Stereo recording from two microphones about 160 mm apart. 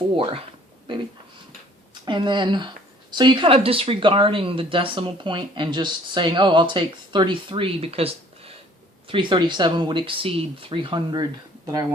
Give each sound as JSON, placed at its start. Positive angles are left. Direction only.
{"t": 0.2, "sound": "speech", "side_deg": -35}
{"t": 2.0, "sound": "speech", "side_deg": -30}